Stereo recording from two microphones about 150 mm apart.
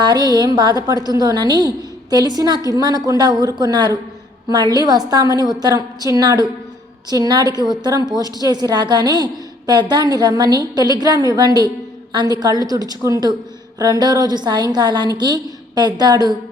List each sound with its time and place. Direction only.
0.0 s a woman's voice: 30° right (ahead or behind)